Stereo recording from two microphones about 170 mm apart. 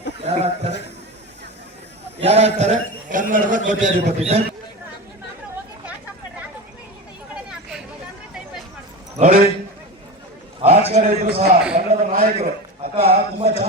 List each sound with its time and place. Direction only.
0.3 s a sound: 40° right (ahead or behind)
2.2 s a man's voice: 40° right (ahead or behind)
9.1 s a man's voice: 45° right (ahead or behind)
10.6 s a man's voice: 35° right (ahead or behind)
11.9 s a sound: 40° right (ahead or behind)
13.1 s a man's voice: 40° right (ahead or behind)